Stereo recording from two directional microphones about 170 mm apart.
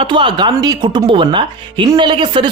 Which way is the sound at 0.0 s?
30° right (ahead or behind).